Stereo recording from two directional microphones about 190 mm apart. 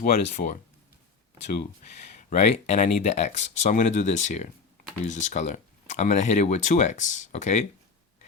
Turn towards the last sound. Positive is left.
turn(degrees=40)  # may be behind; listen again after turning